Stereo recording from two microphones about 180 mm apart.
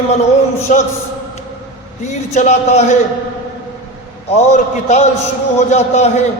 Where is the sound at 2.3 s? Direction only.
40° left (ahead or behind).